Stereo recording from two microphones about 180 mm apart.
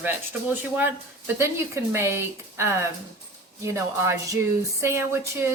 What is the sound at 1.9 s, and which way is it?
Speech, 15° right (ahead or behind).